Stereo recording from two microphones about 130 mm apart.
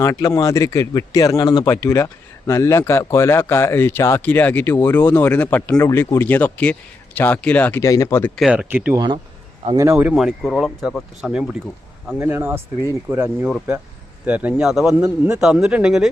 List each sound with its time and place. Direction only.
0.0 s speech: 25° left (ahead or behind)
7.9 s speech: 25° left (ahead or behind)
8.4 s speech: 10° right (ahead or behind)
10.2 s speech: centre (ahead or behind)